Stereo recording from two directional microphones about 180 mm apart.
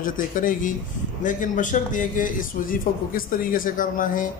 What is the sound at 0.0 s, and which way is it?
Speech, 50° left (ahead or behind).